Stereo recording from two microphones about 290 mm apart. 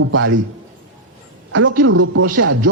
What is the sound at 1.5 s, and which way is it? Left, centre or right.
A man's voice, right.